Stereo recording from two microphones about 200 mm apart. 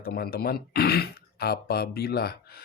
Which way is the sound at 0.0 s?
50° left (ahead or behind).